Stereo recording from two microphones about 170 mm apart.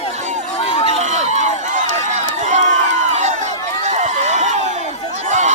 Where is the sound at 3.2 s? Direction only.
45° right (ahead or behind).